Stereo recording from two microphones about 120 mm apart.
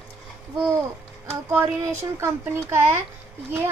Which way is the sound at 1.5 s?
20° right (ahead or behind).